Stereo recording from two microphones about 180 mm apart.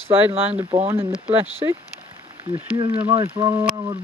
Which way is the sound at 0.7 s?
35° right (ahead or behind).